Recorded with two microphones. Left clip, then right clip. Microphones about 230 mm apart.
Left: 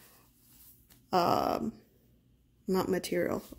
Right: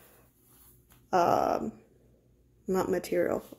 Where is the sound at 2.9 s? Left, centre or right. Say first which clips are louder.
Right 3 dB; left.